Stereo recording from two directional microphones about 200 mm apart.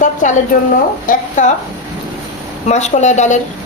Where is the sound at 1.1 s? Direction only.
45° left (ahead or behind).